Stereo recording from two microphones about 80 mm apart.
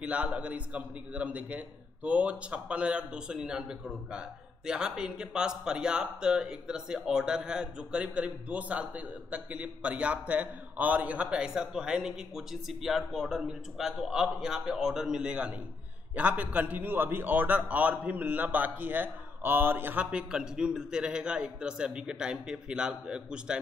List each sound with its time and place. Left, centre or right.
0.0 s speech: centre